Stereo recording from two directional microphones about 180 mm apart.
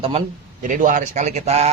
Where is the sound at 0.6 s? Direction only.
50° right (ahead or behind).